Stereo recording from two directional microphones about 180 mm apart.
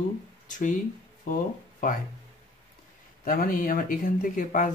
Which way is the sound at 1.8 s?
50° left (ahead or behind).